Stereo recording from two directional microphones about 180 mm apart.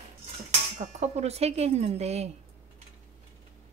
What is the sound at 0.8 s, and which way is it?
A woman's voice, 40° right (ahead or behind).